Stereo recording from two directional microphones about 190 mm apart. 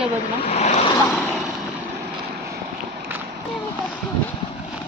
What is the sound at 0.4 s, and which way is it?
Vehicle, 35° left (ahead or behind).